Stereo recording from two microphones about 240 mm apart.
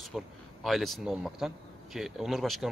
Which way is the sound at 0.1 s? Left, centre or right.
Centre.